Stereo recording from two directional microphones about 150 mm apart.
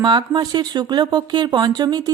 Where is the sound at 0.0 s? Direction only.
30° right (ahead or behind).